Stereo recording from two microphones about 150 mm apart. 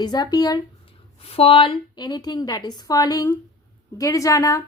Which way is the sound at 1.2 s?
40° left (ahead or behind).